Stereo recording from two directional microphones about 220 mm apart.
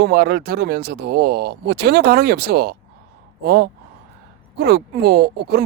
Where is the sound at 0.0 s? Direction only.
45° right (ahead or behind).